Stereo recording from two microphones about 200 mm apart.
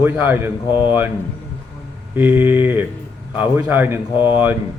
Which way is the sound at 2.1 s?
10° right (ahead or behind).